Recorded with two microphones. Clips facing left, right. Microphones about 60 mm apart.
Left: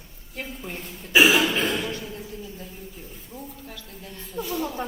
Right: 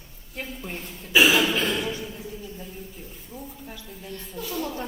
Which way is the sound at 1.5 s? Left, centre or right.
Left.